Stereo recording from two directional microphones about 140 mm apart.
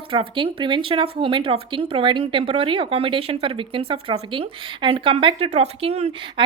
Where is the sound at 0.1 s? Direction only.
40° right (ahead or behind).